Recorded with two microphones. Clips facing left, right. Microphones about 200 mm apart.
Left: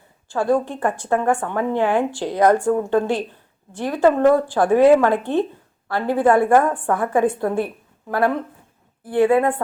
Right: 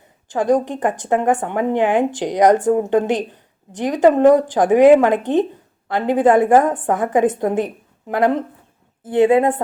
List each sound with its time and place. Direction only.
0.3 s a woman's voice: 15° right (ahead or behind)